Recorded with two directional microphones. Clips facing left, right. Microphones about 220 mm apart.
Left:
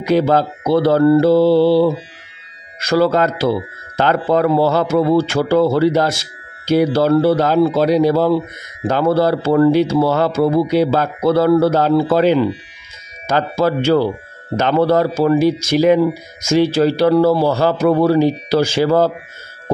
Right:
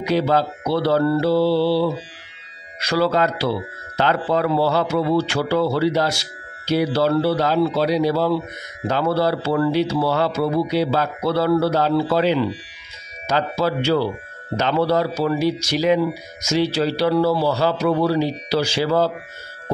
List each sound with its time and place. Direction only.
0.0 s a man's voice: 50° left (ahead or behind)